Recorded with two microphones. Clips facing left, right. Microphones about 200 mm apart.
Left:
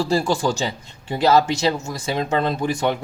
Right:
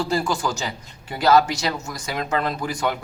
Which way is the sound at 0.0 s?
30° left (ahead or behind).